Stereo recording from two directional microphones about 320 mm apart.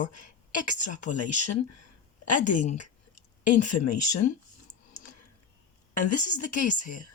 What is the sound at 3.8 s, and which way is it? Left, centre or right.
Speech, left.